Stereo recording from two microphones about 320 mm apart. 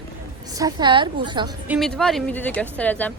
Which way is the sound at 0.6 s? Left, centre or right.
Centre.